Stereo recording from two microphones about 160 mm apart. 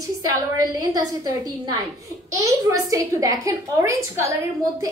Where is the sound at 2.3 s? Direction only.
20° right (ahead or behind).